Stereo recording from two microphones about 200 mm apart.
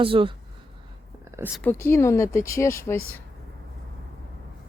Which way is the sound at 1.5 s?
10° left (ahead or behind).